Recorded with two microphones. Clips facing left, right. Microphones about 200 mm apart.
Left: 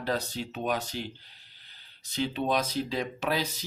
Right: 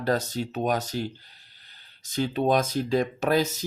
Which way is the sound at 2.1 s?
45° right (ahead or behind).